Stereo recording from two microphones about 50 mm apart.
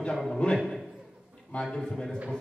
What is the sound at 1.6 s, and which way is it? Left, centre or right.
Speech, centre.